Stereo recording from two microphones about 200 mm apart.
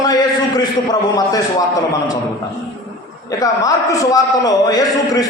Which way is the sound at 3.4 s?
15° left (ahead or behind).